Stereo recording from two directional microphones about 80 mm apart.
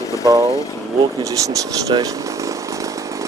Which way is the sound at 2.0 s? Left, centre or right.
Right.